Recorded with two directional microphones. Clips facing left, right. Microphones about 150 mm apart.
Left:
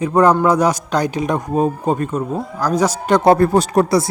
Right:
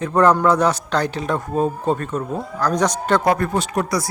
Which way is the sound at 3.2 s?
30° left (ahead or behind).